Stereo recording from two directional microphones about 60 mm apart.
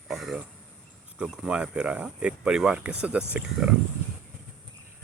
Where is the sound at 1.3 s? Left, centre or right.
Centre.